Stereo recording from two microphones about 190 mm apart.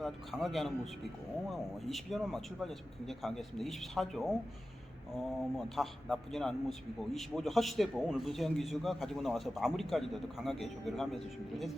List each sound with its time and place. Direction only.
0.0 s a man's voice: centre (ahead or behind)